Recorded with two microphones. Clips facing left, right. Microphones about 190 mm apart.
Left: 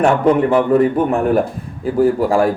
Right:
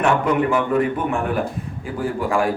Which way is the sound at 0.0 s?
35° left (ahead or behind).